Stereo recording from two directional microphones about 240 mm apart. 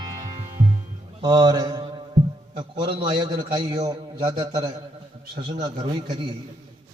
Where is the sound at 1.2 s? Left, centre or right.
Centre.